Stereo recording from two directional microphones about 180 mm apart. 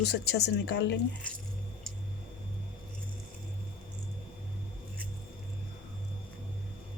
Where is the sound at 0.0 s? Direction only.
65° left (ahead or behind).